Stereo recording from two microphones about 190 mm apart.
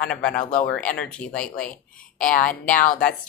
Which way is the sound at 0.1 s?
5° left (ahead or behind).